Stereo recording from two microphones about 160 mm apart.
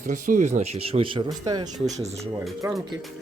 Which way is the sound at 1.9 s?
45° right (ahead or behind).